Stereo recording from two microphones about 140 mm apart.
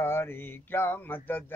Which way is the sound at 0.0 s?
15° left (ahead or behind).